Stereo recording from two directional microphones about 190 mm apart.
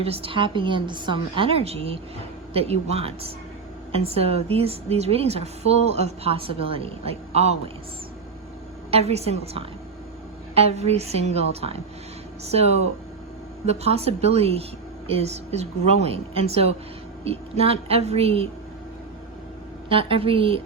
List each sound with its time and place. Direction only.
0.0 s a woman's voice: 30° right (ahead or behind)
8.9 s a woman's voice: 35° right (ahead or behind)
19.9 s a woman's voice: 30° right (ahead or behind)